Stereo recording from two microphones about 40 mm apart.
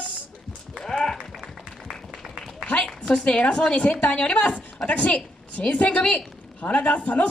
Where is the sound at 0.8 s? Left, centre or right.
Centre.